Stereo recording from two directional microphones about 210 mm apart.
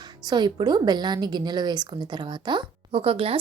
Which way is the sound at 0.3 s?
20° right (ahead or behind).